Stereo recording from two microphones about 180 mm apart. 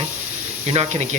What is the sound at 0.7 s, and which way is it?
Speech, 35° right (ahead or behind).